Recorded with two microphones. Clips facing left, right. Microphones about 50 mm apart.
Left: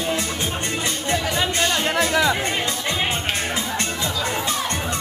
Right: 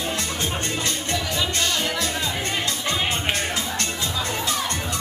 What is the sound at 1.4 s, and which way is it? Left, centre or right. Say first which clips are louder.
Music: left 3 dB; left.